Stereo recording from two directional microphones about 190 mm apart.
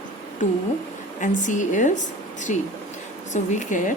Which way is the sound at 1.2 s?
40° left (ahead or behind).